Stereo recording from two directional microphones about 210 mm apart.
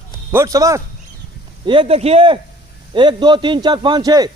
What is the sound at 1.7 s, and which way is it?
A man's voice, 25° right (ahead or behind).